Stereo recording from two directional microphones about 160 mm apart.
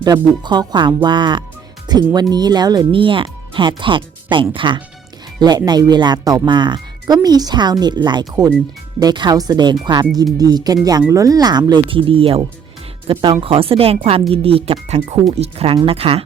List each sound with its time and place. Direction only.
0.0 s speech: 25° right (ahead or behind)